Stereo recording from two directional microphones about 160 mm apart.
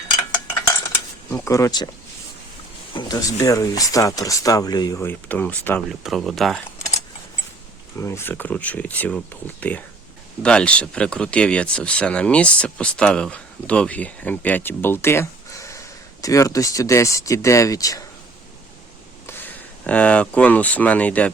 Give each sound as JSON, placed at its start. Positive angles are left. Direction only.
{"t": 1.3, "sound": "speech", "side_deg": 20}
{"t": 2.9, "sound": "speech", "side_deg": 25}
{"t": 6.0, "sound": "speech", "side_deg": 0}
{"t": 7.9, "sound": "speech", "side_deg": 15}
{"t": 19.3, "sound": "speech", "side_deg": 10}